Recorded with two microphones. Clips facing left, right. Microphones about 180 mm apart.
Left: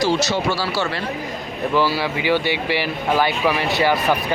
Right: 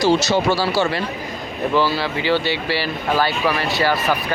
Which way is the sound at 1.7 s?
10° left (ahead or behind).